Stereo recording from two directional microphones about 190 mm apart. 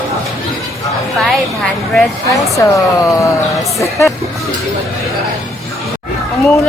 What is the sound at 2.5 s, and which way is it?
A woman's voice, 15° left (ahead or behind).